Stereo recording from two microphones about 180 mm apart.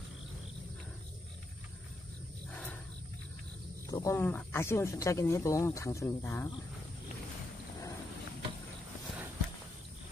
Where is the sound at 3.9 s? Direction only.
20° left (ahead or behind).